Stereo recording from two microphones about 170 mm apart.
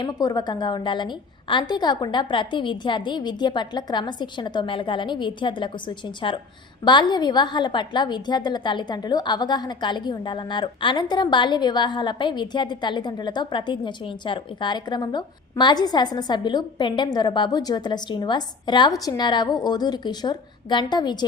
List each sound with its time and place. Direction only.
0.0 s a woman's voice: 20° left (ahead or behind)